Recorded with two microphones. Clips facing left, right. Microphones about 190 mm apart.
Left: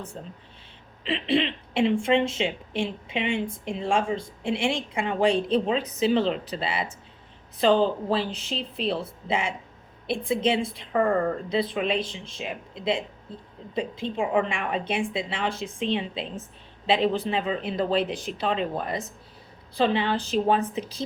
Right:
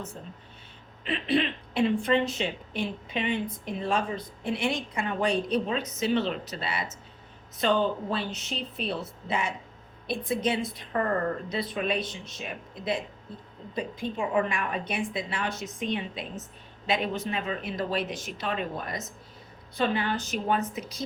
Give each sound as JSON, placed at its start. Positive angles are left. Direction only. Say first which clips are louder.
{"t": 1.0, "sound": "a woman's voice", "louder": "left 2 dB", "side_deg": 25}